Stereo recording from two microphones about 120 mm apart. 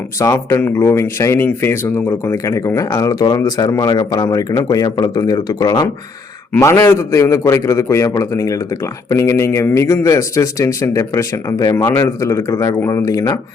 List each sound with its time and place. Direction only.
0.2 s speech: 25° left (ahead or behind)